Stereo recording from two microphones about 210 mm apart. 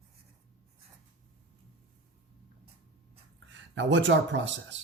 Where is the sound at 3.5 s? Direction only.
60° right (ahead or behind).